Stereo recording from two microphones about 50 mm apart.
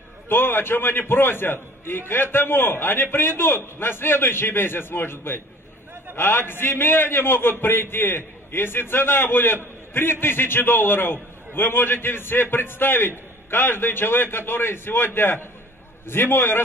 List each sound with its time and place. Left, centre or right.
0.3 s a man's voice: left